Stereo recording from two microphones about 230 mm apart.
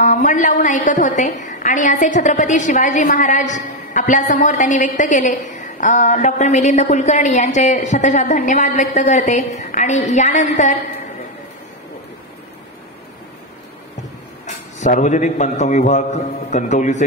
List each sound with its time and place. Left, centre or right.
0.0 s a woman's voice: left
14.4 s a woman's voice: left